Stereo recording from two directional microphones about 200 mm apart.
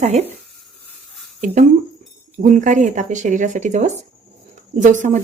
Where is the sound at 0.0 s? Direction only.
35° right (ahead or behind).